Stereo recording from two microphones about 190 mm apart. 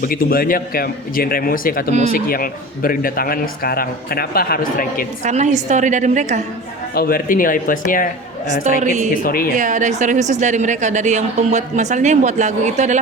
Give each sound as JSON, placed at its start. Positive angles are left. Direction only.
{"t": 0.0, "sound": "a man's voice", "side_deg": 50}
{"t": 1.9, "sound": "a woman's voice", "side_deg": -35}
{"t": 2.1, "sound": "a man's voice", "side_deg": 50}
{"t": 5.2, "sound": "a woman's voice", "side_deg": -40}
{"t": 6.9, "sound": "a man's voice", "side_deg": 50}
{"t": 8.8, "sound": "a woman's voice", "side_deg": -40}
{"t": 9.2, "sound": "a man's voice", "side_deg": 50}
{"t": 9.6, "sound": "a woman's voice", "side_deg": -40}